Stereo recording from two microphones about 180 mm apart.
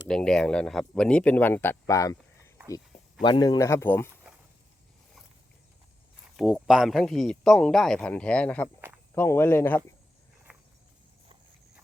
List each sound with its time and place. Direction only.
0.1 s speech: 5° left (ahead or behind)
6.3 s speech: centre (ahead or behind)